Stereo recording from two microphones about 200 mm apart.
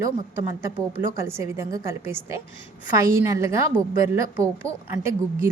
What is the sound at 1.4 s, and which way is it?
A woman's voice, 15° right (ahead or behind).